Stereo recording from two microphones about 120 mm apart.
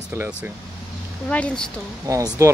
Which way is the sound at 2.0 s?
25° right (ahead or behind).